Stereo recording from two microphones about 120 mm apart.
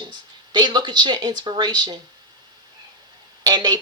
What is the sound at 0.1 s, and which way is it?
Speech, 40° right (ahead or behind).